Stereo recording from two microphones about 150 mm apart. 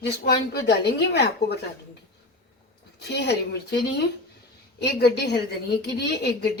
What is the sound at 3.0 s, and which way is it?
A woman's voice, 90° left.